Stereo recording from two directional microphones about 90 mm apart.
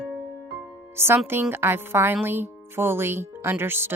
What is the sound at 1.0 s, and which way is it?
Speech, 25° right (ahead or behind).